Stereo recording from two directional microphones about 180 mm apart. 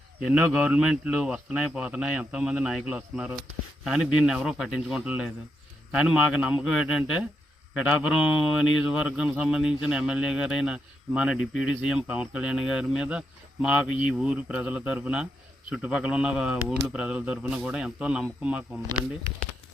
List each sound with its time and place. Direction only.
0.3 s a man's voice: 5° right (ahead or behind)
13.8 s speech: 90° left
14.1 s a man's voice: 5° right (ahead or behind)